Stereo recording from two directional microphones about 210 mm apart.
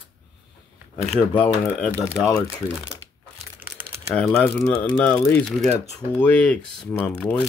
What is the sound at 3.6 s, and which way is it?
Crumpling, 10° right (ahead or behind).